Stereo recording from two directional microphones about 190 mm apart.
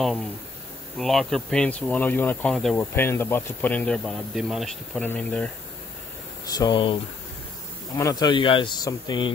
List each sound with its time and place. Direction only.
0.9 s speech: centre (ahead or behind)
6.4 s speech: 20° left (ahead or behind)
8.0 s speech: 20° left (ahead or behind)